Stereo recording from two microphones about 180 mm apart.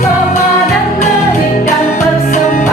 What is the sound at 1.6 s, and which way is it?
Music, 45° left (ahead or behind).